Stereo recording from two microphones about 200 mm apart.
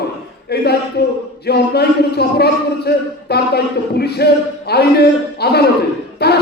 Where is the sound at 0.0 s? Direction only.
55° left (ahead or behind).